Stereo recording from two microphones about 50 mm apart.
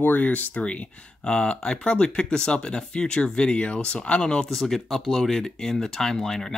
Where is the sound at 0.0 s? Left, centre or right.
Left; by 4.6 s centre.